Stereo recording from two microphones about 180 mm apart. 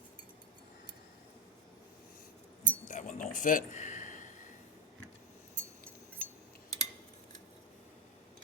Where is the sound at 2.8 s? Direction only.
45° left (ahead or behind).